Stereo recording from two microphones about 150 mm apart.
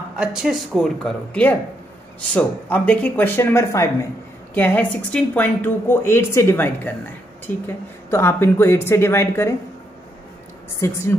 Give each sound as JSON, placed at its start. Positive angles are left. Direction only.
{"t": 0.2, "sound": "a woman's voice", "side_deg": -5}
{"t": 10.8, "sound": "a woman's voice", "side_deg": 20}